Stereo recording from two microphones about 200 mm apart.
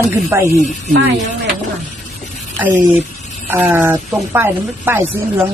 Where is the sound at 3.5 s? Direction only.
10° right (ahead or behind).